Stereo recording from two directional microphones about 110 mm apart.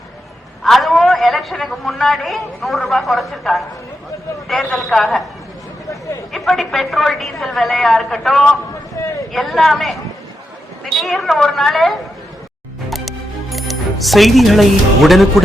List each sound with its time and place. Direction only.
0.6 s a man's voice: centre (ahead or behind)
6.3 s a man's voice: centre (ahead or behind)
9.0 s speech: 25° left (ahead or behind)
9.3 s a man's voice: centre (ahead or behind)
12.9 s music: centre (ahead or behind)